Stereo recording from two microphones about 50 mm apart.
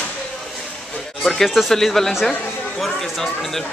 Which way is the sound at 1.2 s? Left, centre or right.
Centre.